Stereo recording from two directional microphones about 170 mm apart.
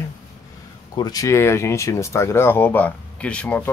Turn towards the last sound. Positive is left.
turn(degrees=10)  # may be behind; listen again after turning